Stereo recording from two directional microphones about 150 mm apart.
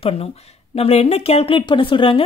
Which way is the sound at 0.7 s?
40° left (ahead or behind).